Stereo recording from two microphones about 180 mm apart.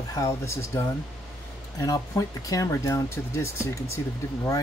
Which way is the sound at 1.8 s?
20° left (ahead or behind).